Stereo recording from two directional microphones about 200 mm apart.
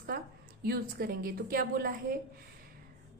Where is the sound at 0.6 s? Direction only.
50° right (ahead or behind).